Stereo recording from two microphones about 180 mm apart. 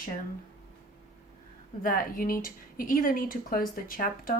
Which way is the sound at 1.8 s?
50° left (ahead or behind).